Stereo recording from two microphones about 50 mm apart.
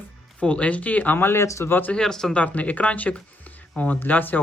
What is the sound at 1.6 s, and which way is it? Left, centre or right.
Speech, left.